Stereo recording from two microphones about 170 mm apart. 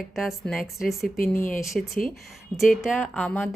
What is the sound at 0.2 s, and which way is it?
Speech, centre (ahead or behind).